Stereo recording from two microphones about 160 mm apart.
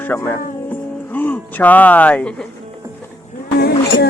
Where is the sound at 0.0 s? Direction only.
15° left (ahead or behind).